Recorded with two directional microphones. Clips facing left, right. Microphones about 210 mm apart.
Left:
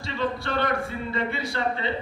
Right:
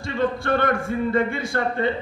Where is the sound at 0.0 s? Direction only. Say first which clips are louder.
Right 5 dB; 50° right (ahead or behind).